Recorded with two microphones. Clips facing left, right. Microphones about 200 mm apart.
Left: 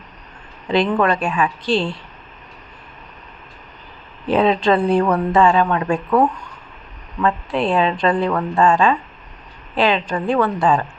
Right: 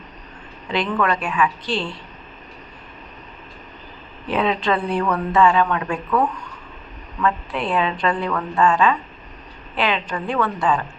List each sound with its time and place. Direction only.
0.7 s speech: 30° left (ahead or behind)
4.3 s speech: 30° left (ahead or behind)